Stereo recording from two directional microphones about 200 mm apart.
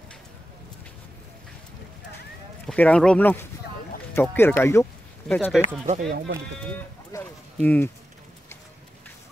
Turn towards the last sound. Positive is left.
turn(degrees=10)  # may be behind; listen again after turning